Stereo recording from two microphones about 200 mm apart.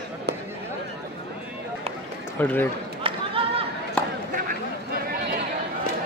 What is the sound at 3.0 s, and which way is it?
Chatter, 25° right (ahead or behind).